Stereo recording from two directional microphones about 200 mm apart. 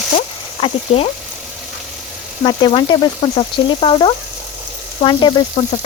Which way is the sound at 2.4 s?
20° left (ahead or behind).